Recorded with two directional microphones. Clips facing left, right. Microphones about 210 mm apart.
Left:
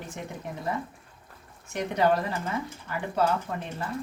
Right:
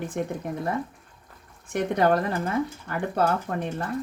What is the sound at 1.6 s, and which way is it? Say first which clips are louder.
Speech: right 3 dB; 55° right (ahead or behind).